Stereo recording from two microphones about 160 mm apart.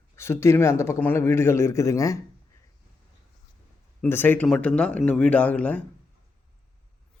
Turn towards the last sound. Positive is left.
turn(degrees=10)  # may be behind; listen again after turning